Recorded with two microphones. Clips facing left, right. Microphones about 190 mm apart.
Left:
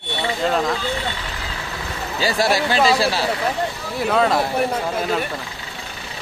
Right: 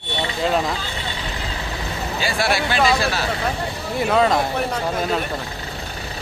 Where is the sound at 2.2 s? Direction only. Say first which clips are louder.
Left 3 dB; 40° left (ahead or behind).